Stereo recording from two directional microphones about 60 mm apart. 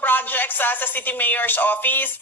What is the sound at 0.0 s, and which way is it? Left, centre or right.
Speech, left.